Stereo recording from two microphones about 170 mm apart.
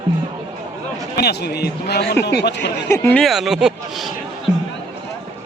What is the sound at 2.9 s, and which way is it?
Speech, 15° left (ahead or behind).